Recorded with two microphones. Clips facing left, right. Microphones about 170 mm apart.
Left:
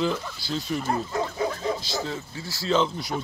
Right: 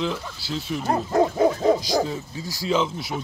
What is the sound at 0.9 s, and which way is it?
Bow-wow, 55° right (ahead or behind).